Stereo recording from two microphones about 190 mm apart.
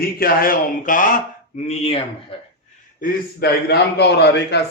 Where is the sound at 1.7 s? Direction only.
30° left (ahead or behind).